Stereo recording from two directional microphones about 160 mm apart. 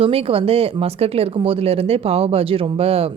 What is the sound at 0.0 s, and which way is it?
Speech, 35° right (ahead or behind).